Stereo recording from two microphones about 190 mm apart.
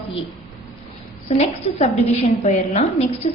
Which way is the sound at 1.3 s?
35° left (ahead or behind).